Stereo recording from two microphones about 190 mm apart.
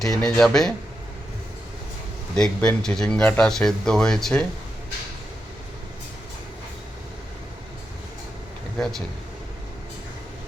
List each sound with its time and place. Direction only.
0.0 s speech: 5° left (ahead or behind)
2.3 s speech: 5° left (ahead or behind)